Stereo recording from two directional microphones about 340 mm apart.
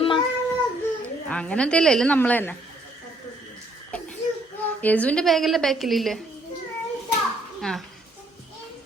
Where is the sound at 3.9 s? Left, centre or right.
Centre.